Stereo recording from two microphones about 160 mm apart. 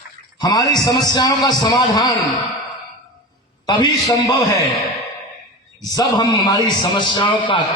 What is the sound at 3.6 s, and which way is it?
Speech, 25° left (ahead or behind).